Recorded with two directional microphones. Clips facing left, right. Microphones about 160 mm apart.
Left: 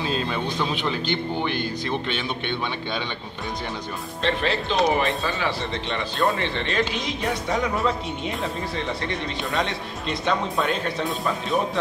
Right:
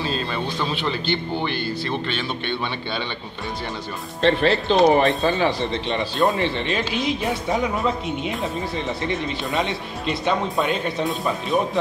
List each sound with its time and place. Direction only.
0.3 s speech: 5° left (ahead or behind)
4.2 s speech: 35° right (ahead or behind)
5.2 s speech: 25° right (ahead or behind)
7.8 s speech: centre (ahead or behind)